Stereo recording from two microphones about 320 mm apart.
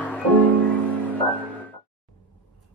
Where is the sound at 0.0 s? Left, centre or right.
Centre.